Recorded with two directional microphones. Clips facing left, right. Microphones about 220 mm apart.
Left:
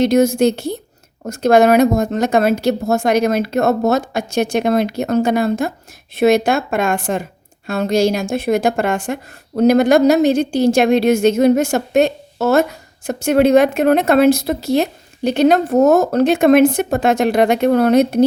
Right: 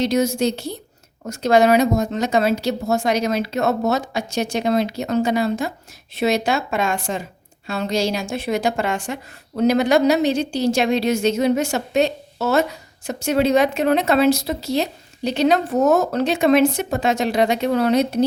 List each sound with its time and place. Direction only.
0.0 s speech: 50° left (ahead or behind)